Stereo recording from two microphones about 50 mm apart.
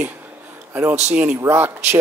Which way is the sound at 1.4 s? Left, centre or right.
Right.